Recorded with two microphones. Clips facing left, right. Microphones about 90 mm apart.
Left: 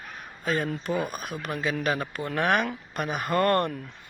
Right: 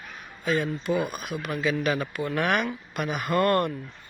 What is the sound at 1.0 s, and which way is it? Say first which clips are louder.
Speech: right 1 dB; 40° left (ahead or behind).